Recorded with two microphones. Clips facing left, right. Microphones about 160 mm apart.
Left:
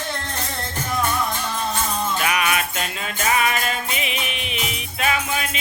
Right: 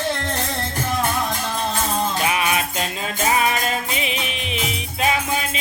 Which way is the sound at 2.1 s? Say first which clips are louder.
Right 1 dB; 25° right (ahead or behind).